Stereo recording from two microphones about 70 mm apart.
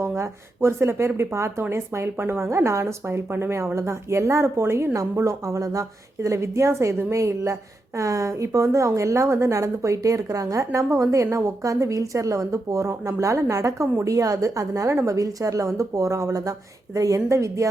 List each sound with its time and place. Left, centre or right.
0.2 s a woman's voice: right